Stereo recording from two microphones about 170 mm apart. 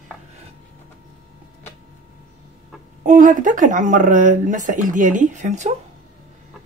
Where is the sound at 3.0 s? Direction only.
50° right (ahead or behind).